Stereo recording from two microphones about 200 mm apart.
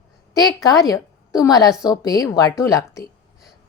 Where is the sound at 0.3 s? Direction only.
20° left (ahead or behind).